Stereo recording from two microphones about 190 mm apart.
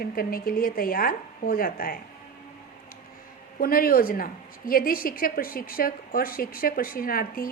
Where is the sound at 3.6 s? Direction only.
50° left (ahead or behind).